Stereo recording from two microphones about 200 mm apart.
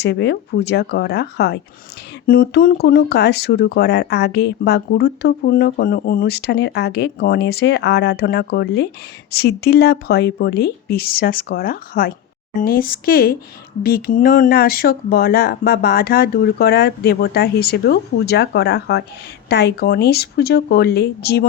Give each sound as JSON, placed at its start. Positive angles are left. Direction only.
{"t": 0.0, "sound": "speech", "side_deg": 55}